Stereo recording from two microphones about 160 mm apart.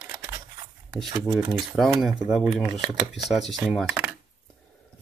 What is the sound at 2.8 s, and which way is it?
Speech, 25° right (ahead or behind).